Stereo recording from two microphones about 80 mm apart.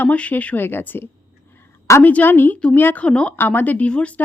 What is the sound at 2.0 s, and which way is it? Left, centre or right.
Speech, left.